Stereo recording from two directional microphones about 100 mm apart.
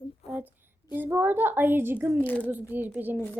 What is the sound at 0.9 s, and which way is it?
A woman's voice, 20° right (ahead or behind).